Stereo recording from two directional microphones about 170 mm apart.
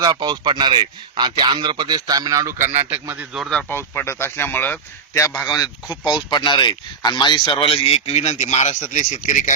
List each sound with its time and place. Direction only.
0.0 s a man's voice: 25° right (ahead or behind); by 9.5 s 45° left (ahead or behind)